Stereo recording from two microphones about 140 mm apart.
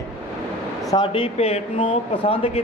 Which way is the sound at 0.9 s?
35° left (ahead or behind).